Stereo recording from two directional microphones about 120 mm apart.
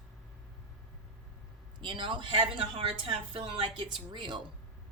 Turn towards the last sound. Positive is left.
turn(degrees=-40)  # may be behind; listen again after turning